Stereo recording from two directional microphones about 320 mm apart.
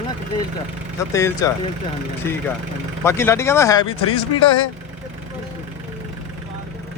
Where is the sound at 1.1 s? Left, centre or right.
Centre.